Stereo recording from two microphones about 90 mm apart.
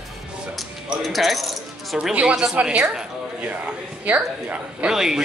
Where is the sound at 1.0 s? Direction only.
Centre (ahead or behind).